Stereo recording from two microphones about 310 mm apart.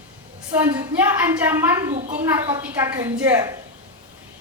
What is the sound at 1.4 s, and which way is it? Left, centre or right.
A woman's voice, centre.